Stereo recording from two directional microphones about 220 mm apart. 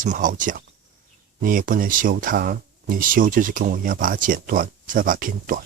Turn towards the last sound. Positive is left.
turn(degrees=-40)  # may be behind; listen again after turning